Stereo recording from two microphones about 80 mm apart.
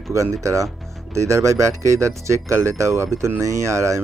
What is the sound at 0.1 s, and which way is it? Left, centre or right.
Speech, right.